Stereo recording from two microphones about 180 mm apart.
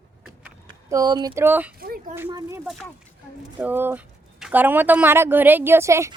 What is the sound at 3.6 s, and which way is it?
Speech, 10° right (ahead or behind).